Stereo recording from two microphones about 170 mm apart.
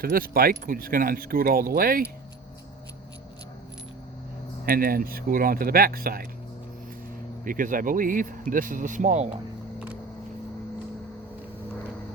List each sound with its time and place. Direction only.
0.0 s speech: 60° right (ahead or behind)
4.6 s speech: 60° right (ahead or behind)
7.4 s speech: 50° right (ahead or behind)